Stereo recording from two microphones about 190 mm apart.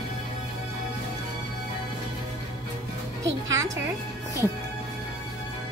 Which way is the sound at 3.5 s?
20° right (ahead or behind).